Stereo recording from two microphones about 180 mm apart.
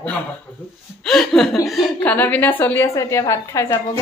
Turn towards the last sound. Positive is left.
turn(degrees=15)  # may be behind; listen again after turning